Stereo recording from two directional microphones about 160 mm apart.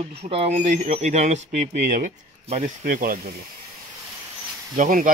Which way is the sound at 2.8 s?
60° right (ahead or behind).